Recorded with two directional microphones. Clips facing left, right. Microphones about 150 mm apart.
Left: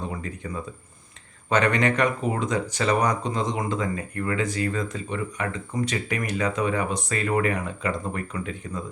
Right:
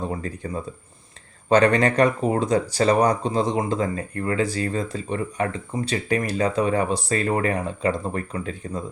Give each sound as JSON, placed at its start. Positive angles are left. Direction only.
{"t": 0.1, "sound": "speech", "side_deg": -35}